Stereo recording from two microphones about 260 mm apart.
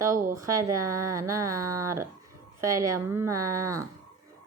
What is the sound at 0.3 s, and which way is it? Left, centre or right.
Speech, centre.